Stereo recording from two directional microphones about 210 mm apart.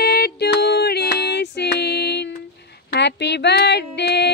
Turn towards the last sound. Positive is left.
turn(degrees=50)  # may be behind; listen again after turning